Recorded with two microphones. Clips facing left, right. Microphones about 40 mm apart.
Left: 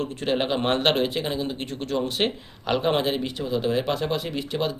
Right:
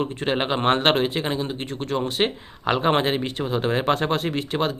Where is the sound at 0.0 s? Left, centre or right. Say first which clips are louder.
Right 1 dB; right.